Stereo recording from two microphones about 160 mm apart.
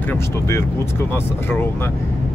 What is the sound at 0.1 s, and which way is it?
Speech, 15° left (ahead or behind).